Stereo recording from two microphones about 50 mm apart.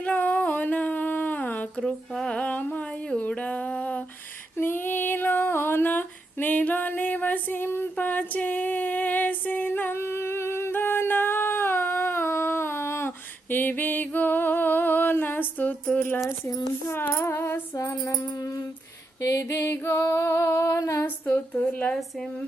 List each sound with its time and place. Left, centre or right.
0.0 s a sound: left
1.8 s music: centre
2.3 s music: left
3.2 s a sound: left
4.5 s female singing: left
7.9 s female singing: left
15.1 s a sound: left
16.9 s female singing: left
20.0 s female singing: left
20.7 s female singing: left
21.6 s speech: left